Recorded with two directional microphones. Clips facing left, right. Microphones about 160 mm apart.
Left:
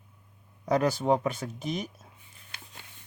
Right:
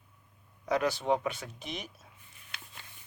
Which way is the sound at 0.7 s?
40° left (ahead or behind).